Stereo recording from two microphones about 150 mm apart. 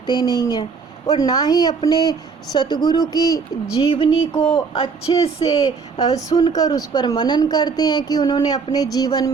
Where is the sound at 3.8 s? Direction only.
35° left (ahead or behind).